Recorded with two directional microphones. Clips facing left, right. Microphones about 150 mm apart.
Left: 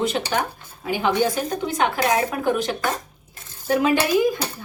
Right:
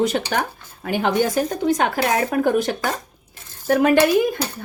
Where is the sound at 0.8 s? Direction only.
65° right (ahead or behind).